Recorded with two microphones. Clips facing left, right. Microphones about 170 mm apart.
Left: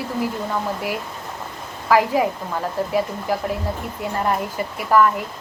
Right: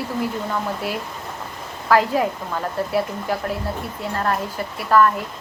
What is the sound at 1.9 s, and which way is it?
A woman's voice, 10° left (ahead or behind).